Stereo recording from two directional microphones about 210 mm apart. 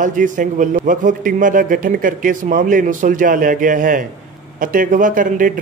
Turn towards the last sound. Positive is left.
turn(degrees=-40)  # may be behind; listen again after turning